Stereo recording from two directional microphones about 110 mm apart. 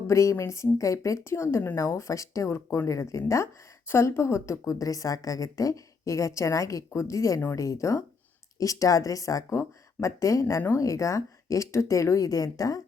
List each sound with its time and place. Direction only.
0.1 s a woman's voice: 25° left (ahead or behind)